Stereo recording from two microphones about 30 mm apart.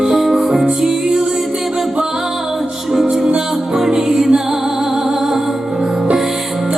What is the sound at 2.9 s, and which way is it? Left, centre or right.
Music, centre.